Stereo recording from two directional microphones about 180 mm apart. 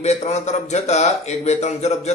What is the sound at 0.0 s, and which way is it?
Speech, 40° left (ahead or behind).